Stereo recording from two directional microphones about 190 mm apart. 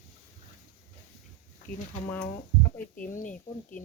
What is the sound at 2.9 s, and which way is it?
Speech, 45° left (ahead or behind).